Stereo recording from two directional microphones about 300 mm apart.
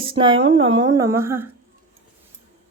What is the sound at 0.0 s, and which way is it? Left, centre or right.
Speech, centre.